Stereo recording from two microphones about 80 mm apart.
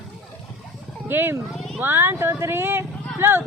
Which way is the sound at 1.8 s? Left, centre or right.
Right.